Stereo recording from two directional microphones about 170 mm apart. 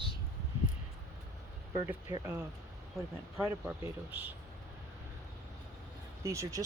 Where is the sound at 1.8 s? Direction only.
15° right (ahead or behind).